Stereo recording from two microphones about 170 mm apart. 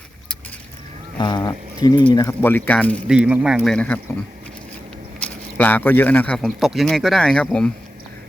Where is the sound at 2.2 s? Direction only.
10° left (ahead or behind).